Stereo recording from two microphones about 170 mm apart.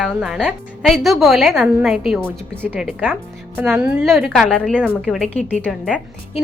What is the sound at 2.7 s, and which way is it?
A woman's voice, 10° right (ahead or behind).